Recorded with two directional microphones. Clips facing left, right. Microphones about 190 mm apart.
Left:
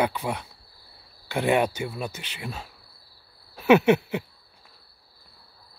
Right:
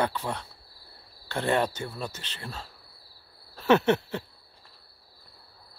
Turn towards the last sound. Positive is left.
turn(degrees=10)  # may be behind; listen again after turning